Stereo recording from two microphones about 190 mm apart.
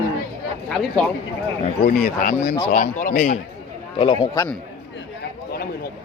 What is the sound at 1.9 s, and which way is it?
A man's voice, 45° left (ahead or behind).